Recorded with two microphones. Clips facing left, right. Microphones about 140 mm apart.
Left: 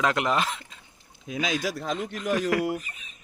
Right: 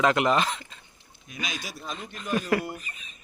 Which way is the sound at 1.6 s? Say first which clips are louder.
Left 9 dB; 90° left.